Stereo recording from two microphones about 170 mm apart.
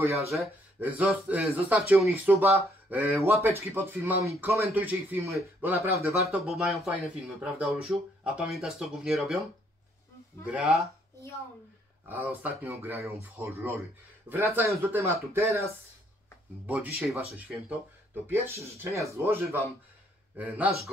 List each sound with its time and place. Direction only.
0.1 s speech: centre (ahead or behind)
6.5 s speech: centre (ahead or behind)
10.4 s speech: 5° right (ahead or behind)
12.1 s speech: 10° right (ahead or behind)
18.1 s speech: 15° right (ahead or behind)